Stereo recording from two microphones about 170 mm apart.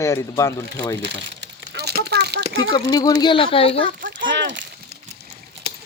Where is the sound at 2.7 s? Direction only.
20° left (ahead or behind).